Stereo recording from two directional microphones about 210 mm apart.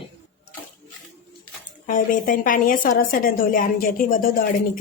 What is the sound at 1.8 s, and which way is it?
A woman's voice, 40° left (ahead or behind).